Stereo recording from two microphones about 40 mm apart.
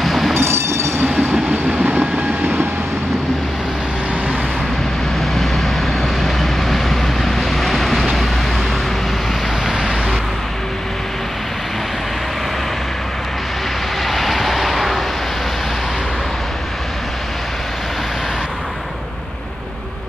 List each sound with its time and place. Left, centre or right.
0.0 s train: centre
0.4 s train: right
1.0 s train: right
5.3 s vehicle: centre
9.7 s vehicle: centre
14.0 s vehicle: centre